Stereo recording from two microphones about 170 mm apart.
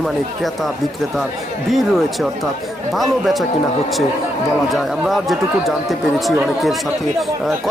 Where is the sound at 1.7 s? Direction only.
Centre (ahead or behind).